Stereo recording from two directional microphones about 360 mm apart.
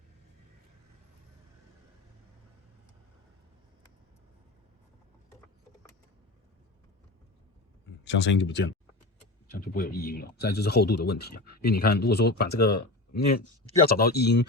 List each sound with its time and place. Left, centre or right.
8.0 s speech: left
12.5 s speech: left
13.1 s speech: left